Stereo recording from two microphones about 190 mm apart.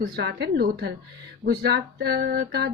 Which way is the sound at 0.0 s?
60° right (ahead or behind).